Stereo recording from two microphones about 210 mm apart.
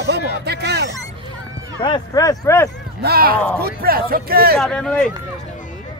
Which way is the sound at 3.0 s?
45° right (ahead or behind).